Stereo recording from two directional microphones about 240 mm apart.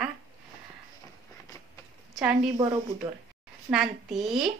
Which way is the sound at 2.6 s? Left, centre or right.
Centre.